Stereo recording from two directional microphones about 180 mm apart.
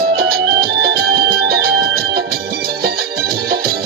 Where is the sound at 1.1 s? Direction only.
60° right (ahead or behind).